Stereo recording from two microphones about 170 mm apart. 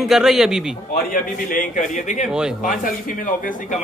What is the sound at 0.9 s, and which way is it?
A man's voice, 50° left (ahead or behind).